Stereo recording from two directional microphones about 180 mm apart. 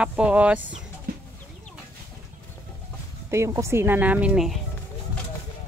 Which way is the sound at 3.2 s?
15° right (ahead or behind).